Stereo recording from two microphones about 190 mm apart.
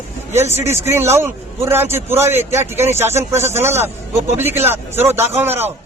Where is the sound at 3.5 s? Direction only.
10° right (ahead or behind).